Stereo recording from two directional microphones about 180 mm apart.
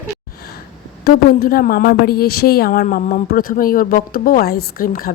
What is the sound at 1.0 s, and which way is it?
A woman's voice, 55° left (ahead or behind).